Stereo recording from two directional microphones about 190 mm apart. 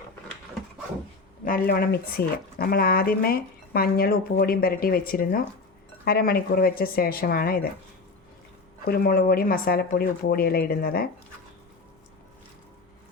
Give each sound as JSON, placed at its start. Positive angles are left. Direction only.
{"t": 1.5, "sound": "speech", "side_deg": 50}
{"t": 8.8, "sound": "speech", "side_deg": 50}